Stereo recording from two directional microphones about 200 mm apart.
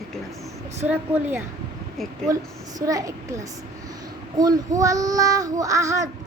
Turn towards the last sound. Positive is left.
turn(degrees=-15)  # may be behind; listen again after turning